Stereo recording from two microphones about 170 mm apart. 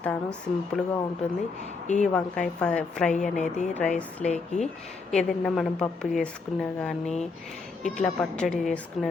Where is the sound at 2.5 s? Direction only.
5° left (ahead or behind).